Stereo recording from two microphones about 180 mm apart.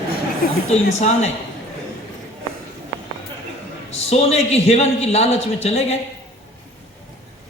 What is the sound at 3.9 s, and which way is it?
A man's voice, 35° left (ahead or behind).